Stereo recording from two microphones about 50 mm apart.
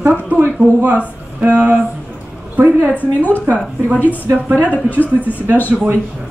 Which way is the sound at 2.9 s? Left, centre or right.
Left.